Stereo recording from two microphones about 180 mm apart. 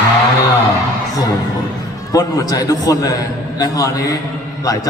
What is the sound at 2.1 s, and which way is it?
A man's voice, 20° left (ahead or behind).